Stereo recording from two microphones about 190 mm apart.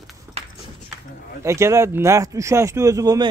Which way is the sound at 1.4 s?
15° right (ahead or behind).